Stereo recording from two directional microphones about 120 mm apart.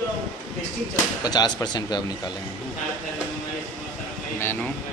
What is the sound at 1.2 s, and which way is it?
Speech, 35° left (ahead or behind).